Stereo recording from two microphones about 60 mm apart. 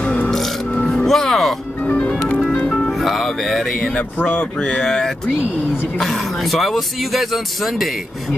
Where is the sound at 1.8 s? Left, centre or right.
Centre.